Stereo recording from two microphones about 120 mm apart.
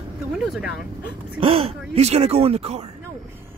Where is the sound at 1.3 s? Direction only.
55° right (ahead or behind).